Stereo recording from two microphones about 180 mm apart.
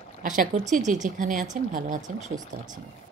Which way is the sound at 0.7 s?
45° right (ahead or behind).